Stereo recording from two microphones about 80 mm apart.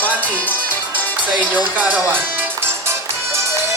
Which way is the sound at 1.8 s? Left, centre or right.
Right.